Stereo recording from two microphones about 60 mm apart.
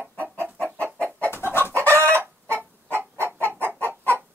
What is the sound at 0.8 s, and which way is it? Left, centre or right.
Chicken, right.